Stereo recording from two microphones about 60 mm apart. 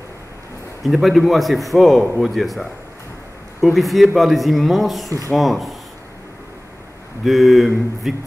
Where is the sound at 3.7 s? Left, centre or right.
Centre.